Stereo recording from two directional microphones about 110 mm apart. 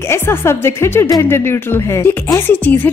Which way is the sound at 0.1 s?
25° left (ahead or behind).